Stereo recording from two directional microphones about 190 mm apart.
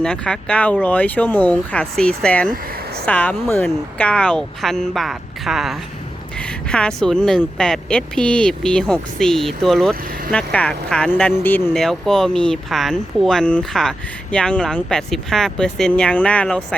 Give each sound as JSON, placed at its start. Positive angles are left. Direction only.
{"t": 0.0, "sound": "speech", "side_deg": 5}
{"t": 2.7, "sound": "a sound", "side_deg": -55}
{"t": 3.1, "sound": "speech", "side_deg": 10}